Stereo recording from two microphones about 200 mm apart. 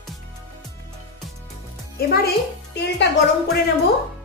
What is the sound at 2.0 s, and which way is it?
A woman's voice, 50° left (ahead or behind).